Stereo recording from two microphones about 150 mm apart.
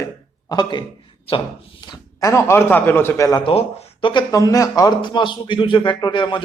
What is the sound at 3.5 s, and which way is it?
Speech, 40° left (ahead or behind).